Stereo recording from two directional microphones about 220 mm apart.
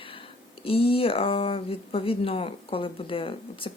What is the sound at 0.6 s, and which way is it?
Speech, 25° left (ahead or behind).